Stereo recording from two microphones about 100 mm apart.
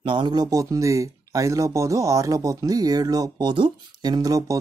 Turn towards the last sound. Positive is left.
turn(degrees=-35)  # may be behind; listen again after turning